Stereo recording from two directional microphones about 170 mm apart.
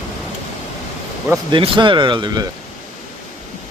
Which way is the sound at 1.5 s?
30° right (ahead or behind).